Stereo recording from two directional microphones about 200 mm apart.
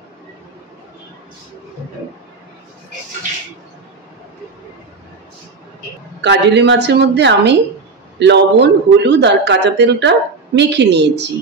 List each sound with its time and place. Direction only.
6.2 s a man's voice: 60° right (ahead or behind)